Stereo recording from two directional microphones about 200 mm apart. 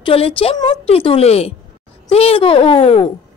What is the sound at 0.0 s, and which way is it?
Speech, 25° left (ahead or behind).